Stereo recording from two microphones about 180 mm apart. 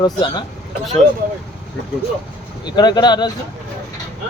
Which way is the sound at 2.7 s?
20° left (ahead or behind).